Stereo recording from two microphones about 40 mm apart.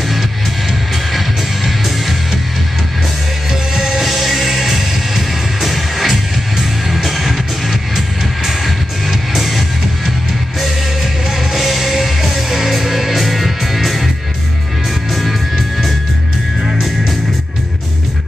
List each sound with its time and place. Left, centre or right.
3.7 s music: centre
4.0 s music: centre
9.3 s music: centre
11.5 s music: centre
15.1 s music: centre